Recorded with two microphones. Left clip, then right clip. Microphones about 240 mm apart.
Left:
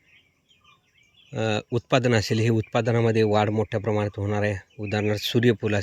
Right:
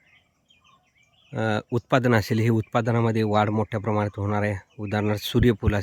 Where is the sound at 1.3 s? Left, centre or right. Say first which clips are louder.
Even; centre.